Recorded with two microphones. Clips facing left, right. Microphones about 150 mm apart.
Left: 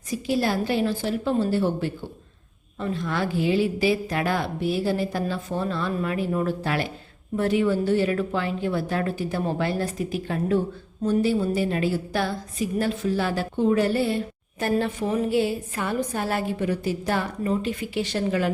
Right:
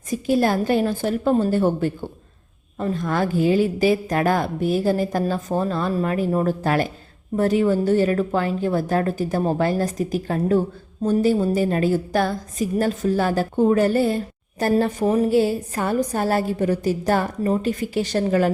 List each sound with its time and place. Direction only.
0.1 s a woman's voice: 50° right (ahead or behind)